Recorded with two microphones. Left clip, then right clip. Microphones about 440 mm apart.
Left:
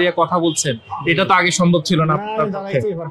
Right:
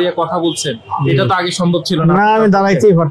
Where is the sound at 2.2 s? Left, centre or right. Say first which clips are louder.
Right 11 dB; right.